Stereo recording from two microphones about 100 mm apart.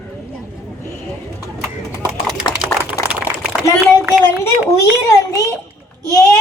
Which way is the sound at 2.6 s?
20° right (ahead or behind).